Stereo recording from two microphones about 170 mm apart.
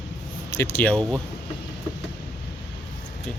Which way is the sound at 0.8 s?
5° left (ahead or behind).